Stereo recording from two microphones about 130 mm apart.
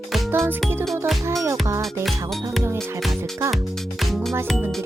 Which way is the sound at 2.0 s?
Centre (ahead or behind).